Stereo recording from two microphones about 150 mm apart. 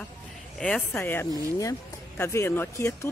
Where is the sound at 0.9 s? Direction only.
15° left (ahead or behind).